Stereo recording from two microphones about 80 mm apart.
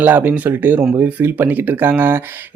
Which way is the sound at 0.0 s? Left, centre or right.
Right.